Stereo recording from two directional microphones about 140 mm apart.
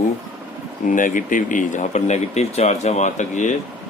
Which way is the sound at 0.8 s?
70° left (ahead or behind).